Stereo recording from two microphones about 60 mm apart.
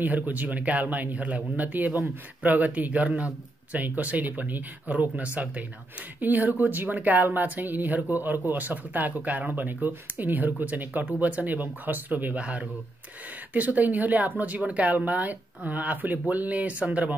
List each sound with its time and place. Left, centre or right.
0.0 s speech: right